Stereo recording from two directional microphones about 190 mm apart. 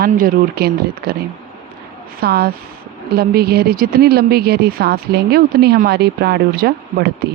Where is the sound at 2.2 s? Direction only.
55° right (ahead or behind).